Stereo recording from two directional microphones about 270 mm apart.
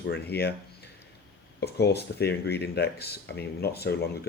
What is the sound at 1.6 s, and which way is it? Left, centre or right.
Speech, left.